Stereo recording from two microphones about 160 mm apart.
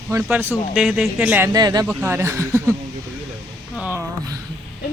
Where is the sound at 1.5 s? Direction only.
25° right (ahead or behind).